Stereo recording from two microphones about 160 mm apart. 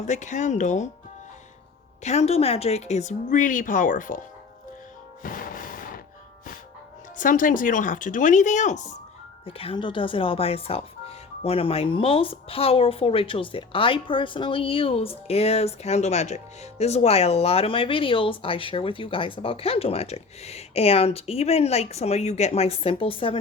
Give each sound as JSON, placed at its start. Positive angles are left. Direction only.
{"t": 0.0, "sound": "a woman's voice", "side_deg": 50}
{"t": 2.0, "sound": "a woman's voice", "side_deg": 40}
{"t": 5.2, "sound": "a sound", "side_deg": 60}
{"t": 7.2, "sound": "speech", "side_deg": 55}
{"t": 9.5, "sound": "speech", "side_deg": 35}